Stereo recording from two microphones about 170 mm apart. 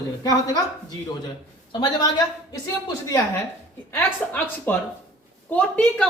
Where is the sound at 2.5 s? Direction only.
20° left (ahead or behind).